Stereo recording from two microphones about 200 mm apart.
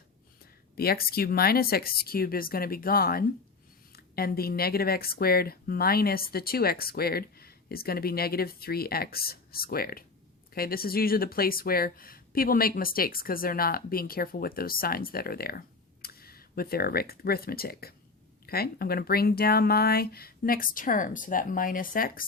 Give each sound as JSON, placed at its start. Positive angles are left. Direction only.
{"t": 0.8, "sound": "speech", "side_deg": 50}